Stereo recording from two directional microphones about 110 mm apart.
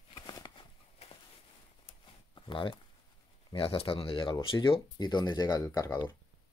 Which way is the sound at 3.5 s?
55° left (ahead or behind).